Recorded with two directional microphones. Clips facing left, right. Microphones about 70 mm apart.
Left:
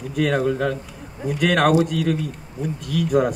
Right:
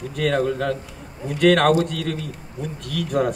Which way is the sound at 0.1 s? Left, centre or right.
Centre.